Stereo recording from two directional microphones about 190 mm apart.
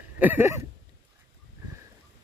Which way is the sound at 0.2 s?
10° right (ahead or behind).